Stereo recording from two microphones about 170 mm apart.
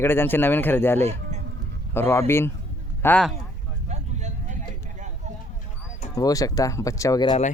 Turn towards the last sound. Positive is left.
turn(degrees=20)  # may be behind; listen again after turning